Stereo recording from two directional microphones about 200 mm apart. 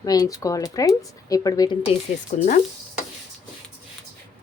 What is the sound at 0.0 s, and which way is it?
Speech, 20° left (ahead or behind).